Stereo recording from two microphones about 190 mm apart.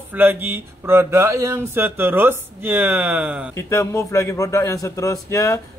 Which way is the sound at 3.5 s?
15° left (ahead or behind).